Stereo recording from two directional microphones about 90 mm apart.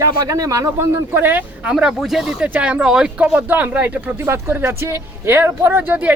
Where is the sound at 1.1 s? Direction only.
20° right (ahead or behind).